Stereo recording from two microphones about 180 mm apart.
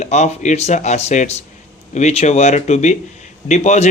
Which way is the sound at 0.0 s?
40° left (ahead or behind).